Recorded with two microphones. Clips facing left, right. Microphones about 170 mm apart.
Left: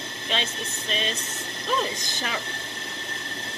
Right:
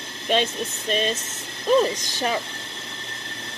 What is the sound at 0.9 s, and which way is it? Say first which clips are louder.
Speech: right 6 dB; 45° right (ahead or behind).